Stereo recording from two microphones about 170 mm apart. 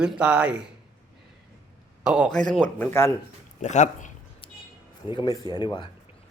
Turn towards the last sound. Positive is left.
turn(degrees=25)  # may be behind; listen again after turning